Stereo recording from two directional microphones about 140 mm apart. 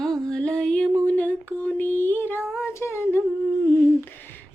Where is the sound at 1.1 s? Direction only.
10° left (ahead or behind).